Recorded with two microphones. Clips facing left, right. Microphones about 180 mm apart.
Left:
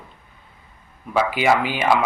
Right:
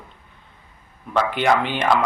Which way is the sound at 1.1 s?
10° left (ahead or behind).